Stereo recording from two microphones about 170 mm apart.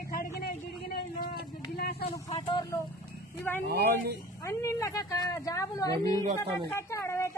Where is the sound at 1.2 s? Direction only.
70° left (ahead or behind).